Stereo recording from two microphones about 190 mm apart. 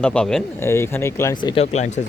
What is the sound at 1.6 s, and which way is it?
Speech, 35° left (ahead or behind).